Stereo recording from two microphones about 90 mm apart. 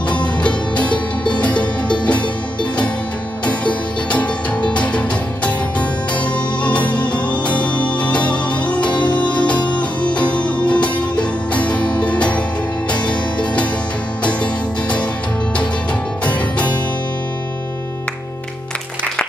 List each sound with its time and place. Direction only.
0.4 s music: 15° left (ahead or behind)
3.4 s music: 15° left (ahead or behind)
16.3 s music: 15° left (ahead or behind)